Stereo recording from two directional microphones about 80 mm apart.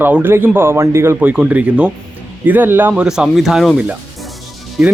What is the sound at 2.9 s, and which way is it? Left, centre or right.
Speech, centre.